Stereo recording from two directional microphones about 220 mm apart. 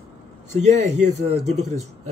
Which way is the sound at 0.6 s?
30° right (ahead or behind).